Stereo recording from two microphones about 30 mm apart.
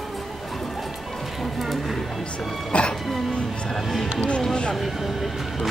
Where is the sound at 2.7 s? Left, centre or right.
Left.